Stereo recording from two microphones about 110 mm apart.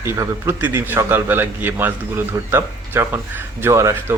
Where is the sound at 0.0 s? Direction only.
25° right (ahead or behind).